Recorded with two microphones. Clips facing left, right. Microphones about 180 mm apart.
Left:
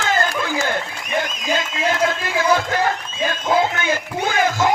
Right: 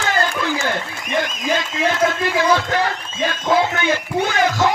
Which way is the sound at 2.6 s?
45° left (ahead or behind).